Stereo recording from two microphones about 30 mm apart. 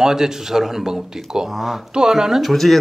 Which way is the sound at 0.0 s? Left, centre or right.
Centre.